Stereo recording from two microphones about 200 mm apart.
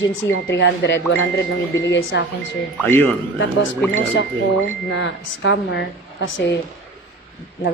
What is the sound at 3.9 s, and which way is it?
Speech, 70° left (ahead or behind).